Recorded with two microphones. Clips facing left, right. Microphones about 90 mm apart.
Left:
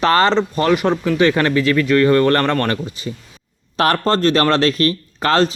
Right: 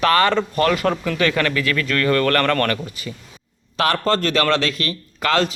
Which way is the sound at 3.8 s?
40° left (ahead or behind).